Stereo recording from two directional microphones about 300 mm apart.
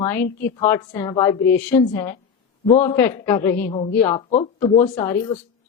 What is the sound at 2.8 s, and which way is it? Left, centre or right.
Speech, centre.